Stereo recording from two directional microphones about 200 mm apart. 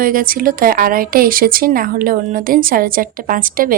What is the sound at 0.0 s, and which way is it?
A woman's voice, 45° right (ahead or behind).